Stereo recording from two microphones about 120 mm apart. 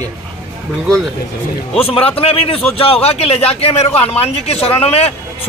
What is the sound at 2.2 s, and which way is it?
A man's voice, 55° left (ahead or behind).